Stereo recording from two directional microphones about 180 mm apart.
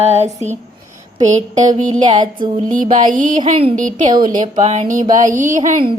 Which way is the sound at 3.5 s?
30° right (ahead or behind).